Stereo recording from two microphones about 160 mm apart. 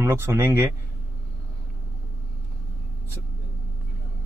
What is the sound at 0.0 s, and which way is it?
Speech, 15° right (ahead or behind).